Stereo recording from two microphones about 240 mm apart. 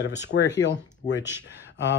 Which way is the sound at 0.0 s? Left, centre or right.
Left.